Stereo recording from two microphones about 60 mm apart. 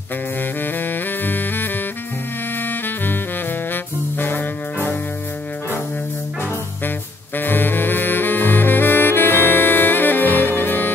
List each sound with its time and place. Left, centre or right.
0.6 s saxophone: left
2.6 s music: left
7.3 s saxophone: left